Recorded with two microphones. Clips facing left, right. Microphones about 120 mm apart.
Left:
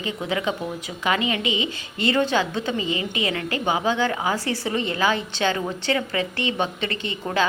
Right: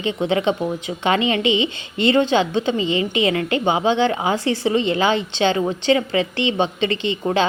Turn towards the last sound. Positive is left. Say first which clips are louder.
# right 7 dB
turn(degrees=-20)  # may be behind; listen again after turning